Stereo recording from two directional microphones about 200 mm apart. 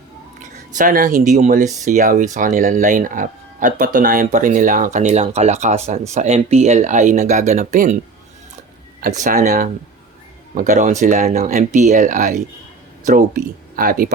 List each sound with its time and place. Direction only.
0.8 s speech: 40° right (ahead or behind)
9.0 s speech: 40° right (ahead or behind)